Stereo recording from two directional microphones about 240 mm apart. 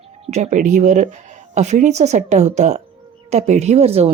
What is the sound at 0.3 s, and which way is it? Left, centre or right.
Speech, right.